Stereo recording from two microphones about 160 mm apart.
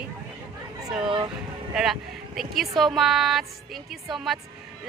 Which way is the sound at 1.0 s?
30° right (ahead or behind).